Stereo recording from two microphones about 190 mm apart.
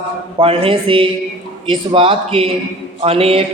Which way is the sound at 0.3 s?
30° right (ahead or behind).